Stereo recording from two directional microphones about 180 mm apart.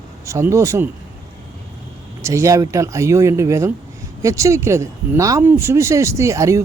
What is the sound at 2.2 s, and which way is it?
Speech, 15° right (ahead or behind).